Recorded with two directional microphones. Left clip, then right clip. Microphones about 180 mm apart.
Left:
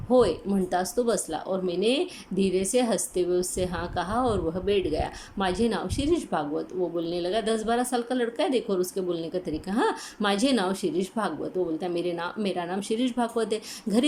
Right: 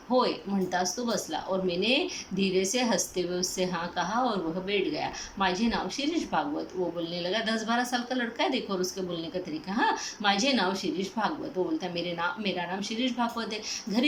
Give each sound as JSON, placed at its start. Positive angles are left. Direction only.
{"t": 0.1, "sound": "a woman's voice", "side_deg": 30}